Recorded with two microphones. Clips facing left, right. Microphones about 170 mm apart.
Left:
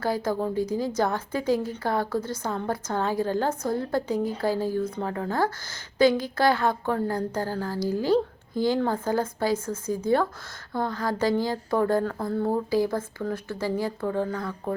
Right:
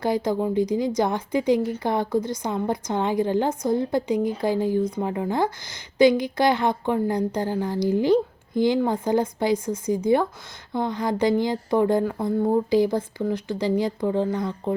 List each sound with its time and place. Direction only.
0.0 s a woman's voice: 15° right (ahead or behind)